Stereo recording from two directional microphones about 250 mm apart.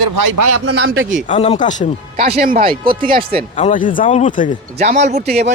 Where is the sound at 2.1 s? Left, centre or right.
Right.